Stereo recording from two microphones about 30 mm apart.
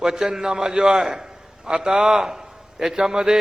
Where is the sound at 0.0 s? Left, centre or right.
Centre.